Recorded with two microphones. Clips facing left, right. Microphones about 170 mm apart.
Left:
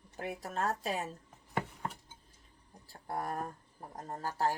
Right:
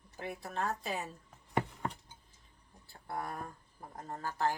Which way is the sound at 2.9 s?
40° left (ahead or behind).